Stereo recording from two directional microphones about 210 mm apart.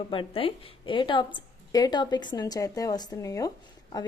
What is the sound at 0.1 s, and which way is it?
A woman's voice, 25° left (ahead or behind).